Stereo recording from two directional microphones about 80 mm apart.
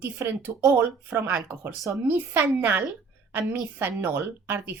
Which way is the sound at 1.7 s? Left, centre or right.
Right.